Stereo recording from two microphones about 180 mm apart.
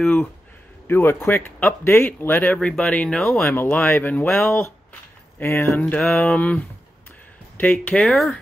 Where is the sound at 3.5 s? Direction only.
10° left (ahead or behind).